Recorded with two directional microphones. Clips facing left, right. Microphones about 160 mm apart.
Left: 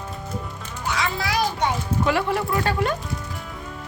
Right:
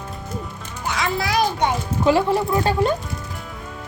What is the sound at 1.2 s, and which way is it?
Children playing, 15° right (ahead or behind).